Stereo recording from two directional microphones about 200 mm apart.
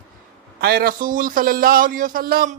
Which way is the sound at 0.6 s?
50° right (ahead or behind).